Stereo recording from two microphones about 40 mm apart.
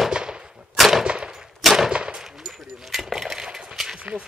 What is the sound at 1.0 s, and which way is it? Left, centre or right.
Gunshot, right.